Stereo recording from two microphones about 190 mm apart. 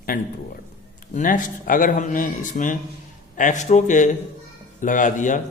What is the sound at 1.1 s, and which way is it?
A man's voice, 45° left (ahead or behind).